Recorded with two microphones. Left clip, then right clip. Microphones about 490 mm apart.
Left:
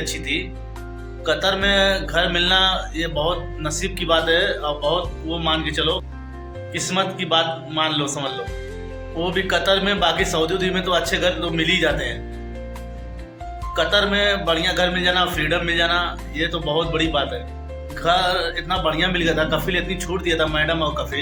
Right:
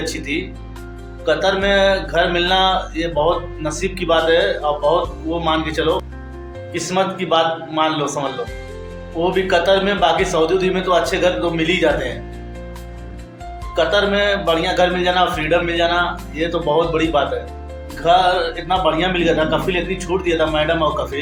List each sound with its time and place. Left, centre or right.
0.0 s a man's voice: left
13.7 s a man's voice: left